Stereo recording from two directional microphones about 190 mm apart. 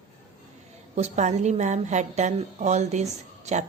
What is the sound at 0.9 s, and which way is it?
Speech, 35° right (ahead or behind).